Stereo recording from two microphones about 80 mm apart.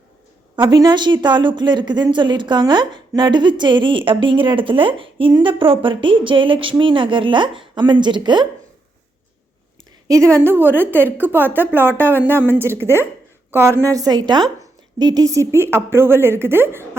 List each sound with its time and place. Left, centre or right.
0.5 s a woman's voice: right
0.8 s speech: right
3.2 s speech: right
10.1 s a woman's voice: right